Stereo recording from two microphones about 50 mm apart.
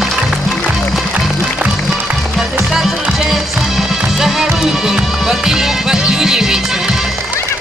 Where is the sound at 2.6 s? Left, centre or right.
Centre.